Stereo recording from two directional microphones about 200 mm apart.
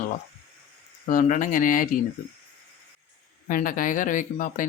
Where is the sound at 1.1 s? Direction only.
40° left (ahead or behind).